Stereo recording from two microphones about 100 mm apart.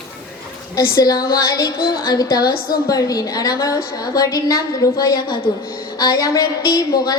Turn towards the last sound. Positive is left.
turn(degrees=40)  # may be behind; listen again after turning